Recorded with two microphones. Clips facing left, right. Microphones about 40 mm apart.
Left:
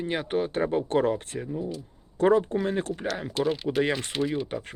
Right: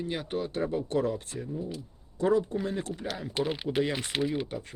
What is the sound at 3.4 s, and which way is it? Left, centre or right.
Speech, centre.